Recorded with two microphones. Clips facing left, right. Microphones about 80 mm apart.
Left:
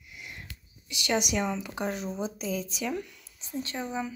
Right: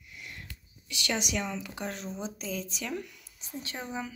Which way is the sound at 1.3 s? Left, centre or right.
Left.